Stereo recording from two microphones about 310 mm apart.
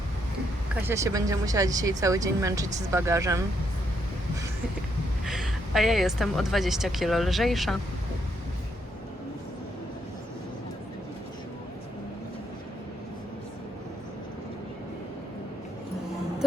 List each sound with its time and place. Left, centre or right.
0.8 s speech: centre
5.2 s a woman's voice: centre